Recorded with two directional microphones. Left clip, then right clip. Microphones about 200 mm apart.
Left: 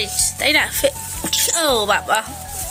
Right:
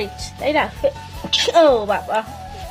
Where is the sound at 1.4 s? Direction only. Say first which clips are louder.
Right 9 dB; 15° left (ahead or behind).